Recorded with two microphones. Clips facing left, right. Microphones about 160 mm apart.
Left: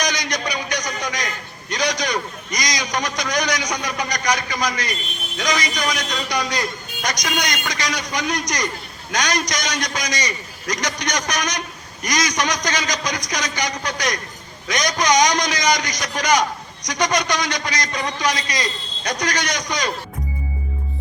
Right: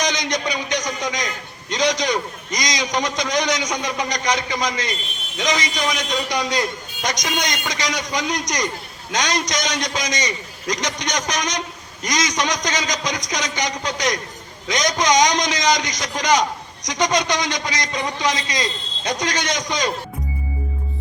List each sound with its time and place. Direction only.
0.0 s a man's voice: 20° right (ahead or behind)